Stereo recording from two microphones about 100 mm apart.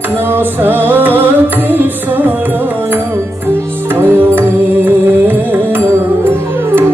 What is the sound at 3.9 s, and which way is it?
Music, 20° right (ahead or behind).